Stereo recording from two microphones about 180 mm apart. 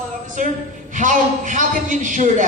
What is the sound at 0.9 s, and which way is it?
A man's voice, 45° right (ahead or behind).